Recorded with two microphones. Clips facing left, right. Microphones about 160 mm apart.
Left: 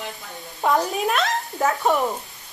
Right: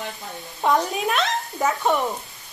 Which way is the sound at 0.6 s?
Centre (ahead or behind).